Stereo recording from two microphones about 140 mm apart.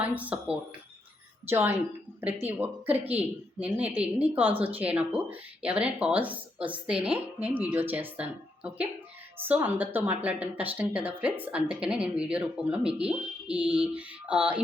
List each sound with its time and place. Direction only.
0.0 s speech: 10° right (ahead or behind)